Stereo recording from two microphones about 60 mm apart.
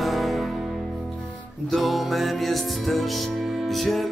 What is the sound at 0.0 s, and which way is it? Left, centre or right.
Music, centre.